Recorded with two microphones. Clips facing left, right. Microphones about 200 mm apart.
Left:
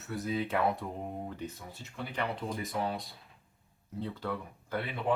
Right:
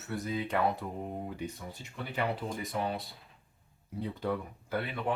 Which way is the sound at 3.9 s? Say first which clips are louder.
Right 2 dB; 15° right (ahead or behind).